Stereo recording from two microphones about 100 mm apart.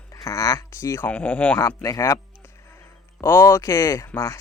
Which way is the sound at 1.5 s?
30° left (ahead or behind).